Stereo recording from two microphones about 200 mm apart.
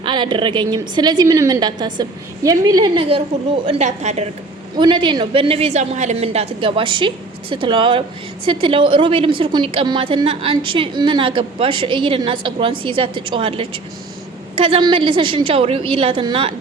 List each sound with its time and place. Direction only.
0.0 s a woman's voice: 25° right (ahead or behind)
4.8 s a woman's voice: 25° right (ahead or behind)